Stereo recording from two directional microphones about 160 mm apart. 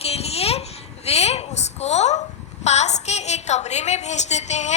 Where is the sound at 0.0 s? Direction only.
40° left (ahead or behind).